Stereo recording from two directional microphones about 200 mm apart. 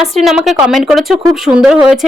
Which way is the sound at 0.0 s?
Centre (ahead or behind).